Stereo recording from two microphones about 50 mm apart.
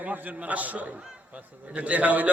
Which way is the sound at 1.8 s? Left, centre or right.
Right.